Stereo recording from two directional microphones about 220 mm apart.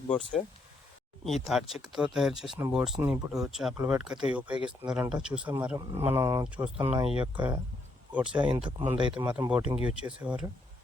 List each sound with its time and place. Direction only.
0.1 s speech: 5° left (ahead or behind)
6.7 s speech: 25° right (ahead or behind)
8.1 s speech: 5° right (ahead or behind)
8.4 s speech: 20° right (ahead or behind)
9.3 s speech: 5° right (ahead or behind)